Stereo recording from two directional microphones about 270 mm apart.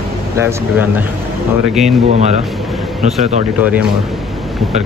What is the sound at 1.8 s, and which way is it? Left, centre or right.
Speech, right.